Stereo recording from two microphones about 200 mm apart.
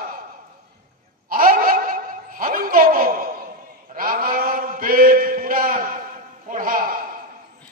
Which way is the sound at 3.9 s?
45° right (ahead or behind).